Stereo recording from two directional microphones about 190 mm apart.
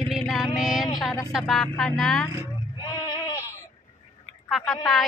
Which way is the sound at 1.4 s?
Centre (ahead or behind).